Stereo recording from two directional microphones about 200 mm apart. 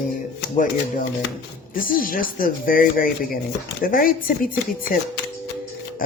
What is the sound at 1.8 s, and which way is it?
Speech, 45° left (ahead or behind).